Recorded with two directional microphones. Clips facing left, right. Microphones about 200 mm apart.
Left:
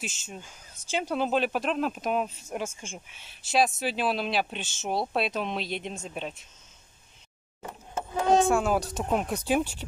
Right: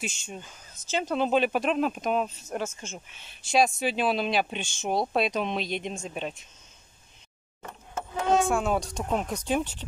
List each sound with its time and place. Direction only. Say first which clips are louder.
0.0 s speech: right 2 dB; centre (ahead or behind)
7.9 s a sound: left 2 dB; 35° left (ahead or behind)
8.5 s speech: left 2 dB; centre (ahead or behind)